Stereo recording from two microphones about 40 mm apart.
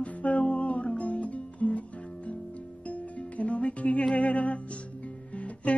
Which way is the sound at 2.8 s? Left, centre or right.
Left.